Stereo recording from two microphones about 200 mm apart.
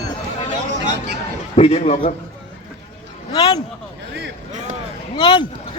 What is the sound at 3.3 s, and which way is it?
Speech, 20° left (ahead or behind).